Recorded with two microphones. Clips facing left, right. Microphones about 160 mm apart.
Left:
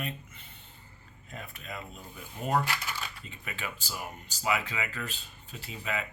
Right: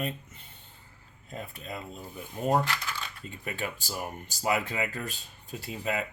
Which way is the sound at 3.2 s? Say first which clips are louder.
Right 5 dB; 45° right (ahead or behind).